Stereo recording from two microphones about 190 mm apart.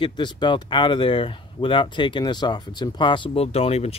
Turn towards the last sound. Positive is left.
turn(degrees=35)  # may be behind; listen again after turning